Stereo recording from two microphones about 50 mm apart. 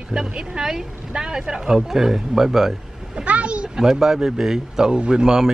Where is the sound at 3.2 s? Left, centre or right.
Right.